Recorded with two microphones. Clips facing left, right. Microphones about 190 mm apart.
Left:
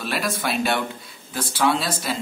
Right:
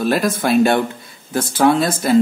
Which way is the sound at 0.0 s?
45° right (ahead or behind).